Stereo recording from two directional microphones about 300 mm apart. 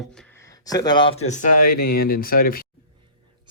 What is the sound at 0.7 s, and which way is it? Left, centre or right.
Speech, centre.